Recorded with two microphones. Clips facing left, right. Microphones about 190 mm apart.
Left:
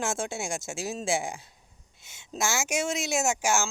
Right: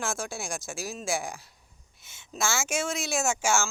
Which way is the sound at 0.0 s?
20° left (ahead or behind).